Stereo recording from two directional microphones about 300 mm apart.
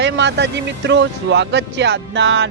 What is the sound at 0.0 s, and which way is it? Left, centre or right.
Speech, right.